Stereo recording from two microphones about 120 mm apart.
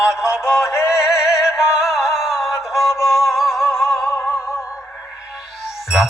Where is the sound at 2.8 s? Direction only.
20° left (ahead or behind).